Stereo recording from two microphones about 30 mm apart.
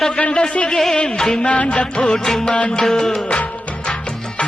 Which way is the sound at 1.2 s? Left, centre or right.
Left.